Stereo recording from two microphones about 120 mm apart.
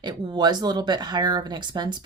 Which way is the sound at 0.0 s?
35° right (ahead or behind).